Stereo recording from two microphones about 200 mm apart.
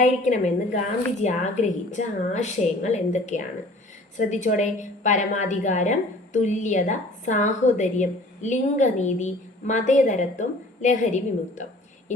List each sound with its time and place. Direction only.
0.0 s a woman's voice: 35° left (ahead or behind)